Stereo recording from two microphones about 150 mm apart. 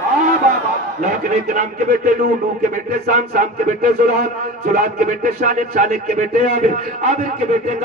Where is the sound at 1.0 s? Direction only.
60° right (ahead or behind).